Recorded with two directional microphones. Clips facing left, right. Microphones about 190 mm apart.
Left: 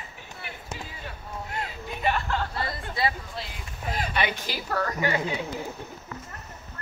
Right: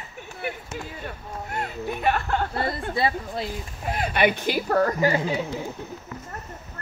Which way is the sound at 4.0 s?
55° right (ahead or behind).